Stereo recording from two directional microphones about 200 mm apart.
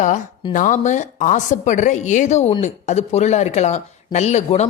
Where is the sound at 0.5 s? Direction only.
40° left (ahead or behind).